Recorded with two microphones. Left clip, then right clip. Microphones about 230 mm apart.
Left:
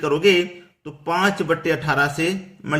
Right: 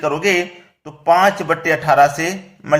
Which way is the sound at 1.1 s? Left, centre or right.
Centre.